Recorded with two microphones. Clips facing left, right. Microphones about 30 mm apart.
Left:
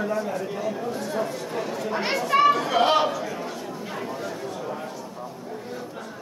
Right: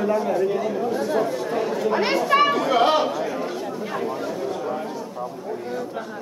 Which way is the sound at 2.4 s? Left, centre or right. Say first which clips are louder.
Right 1 dB; centre.